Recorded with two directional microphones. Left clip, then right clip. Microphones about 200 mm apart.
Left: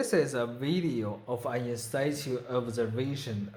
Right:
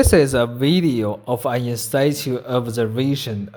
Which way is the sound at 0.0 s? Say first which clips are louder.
Right 13 dB; 40° right (ahead or behind).